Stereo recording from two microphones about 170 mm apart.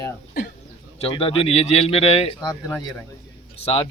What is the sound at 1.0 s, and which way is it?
A man's voice, 35° left (ahead or behind).